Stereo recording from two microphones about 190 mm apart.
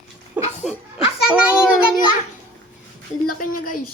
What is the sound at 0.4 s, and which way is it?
Laughter, 10° right (ahead or behind).